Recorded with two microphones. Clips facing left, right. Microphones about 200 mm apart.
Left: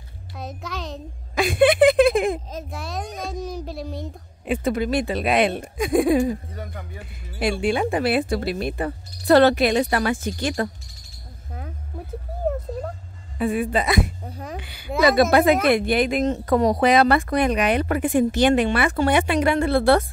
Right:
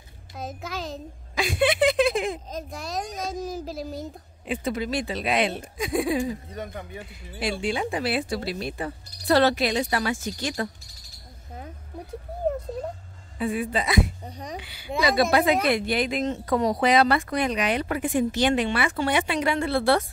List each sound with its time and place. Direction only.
0.4 s speech: centre (ahead or behind)
1.3 s speech: 55° left (ahead or behind)
2.5 s speech: centre (ahead or behind)
4.5 s speech: 55° left (ahead or behind)
6.5 s a man's voice: 20° right (ahead or behind)
7.3 s speech: 55° left (ahead or behind)
13.4 s speech: 55° left (ahead or behind)
14.2 s speech: 5° left (ahead or behind)
14.6 s speech: 50° left (ahead or behind)